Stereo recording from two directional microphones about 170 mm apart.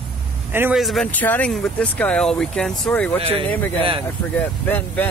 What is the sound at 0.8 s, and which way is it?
Speech, 5° left (ahead or behind).